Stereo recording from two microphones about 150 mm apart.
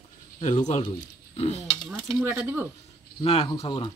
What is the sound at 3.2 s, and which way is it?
Speech, 35° left (ahead or behind).